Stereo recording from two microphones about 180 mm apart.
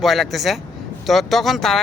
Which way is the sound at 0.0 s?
Centre (ahead or behind).